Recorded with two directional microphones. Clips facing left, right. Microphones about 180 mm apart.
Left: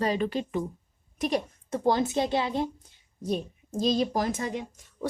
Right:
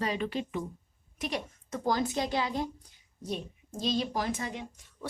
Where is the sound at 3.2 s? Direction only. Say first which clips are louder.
Left 6 dB; 40° left (ahead or behind).